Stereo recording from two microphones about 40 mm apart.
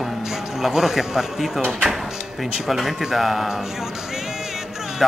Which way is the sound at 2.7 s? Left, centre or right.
Centre.